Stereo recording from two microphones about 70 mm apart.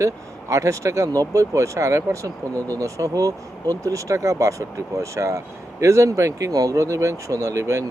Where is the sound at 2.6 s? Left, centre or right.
Left.